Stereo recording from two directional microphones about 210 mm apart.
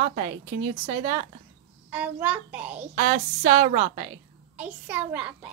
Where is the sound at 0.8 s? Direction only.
25° right (ahead or behind).